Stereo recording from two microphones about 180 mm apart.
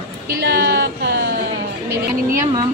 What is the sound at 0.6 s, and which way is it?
Speech, 65° right (ahead or behind).